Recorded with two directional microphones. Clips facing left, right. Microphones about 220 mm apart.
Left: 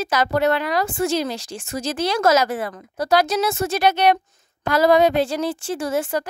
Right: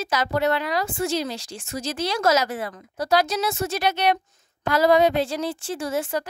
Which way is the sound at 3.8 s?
75° left (ahead or behind).